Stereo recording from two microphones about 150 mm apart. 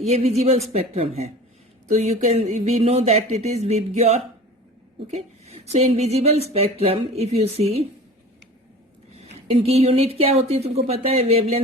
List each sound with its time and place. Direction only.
0.0 s a woman's voice: 45° right (ahead or behind)
9.1 s a woman's voice: 45° right (ahead or behind)